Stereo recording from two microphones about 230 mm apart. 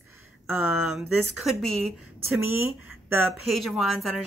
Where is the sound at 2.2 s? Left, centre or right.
Left.